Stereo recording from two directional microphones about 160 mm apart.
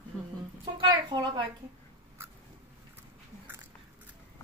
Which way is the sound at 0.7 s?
25° right (ahead or behind).